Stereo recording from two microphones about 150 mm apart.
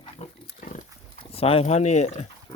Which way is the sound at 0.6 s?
60° left (ahead or behind).